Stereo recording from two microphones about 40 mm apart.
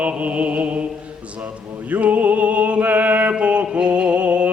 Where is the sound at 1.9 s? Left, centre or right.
Right.